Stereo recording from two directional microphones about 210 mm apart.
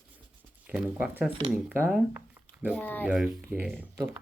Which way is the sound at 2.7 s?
10° left (ahead or behind).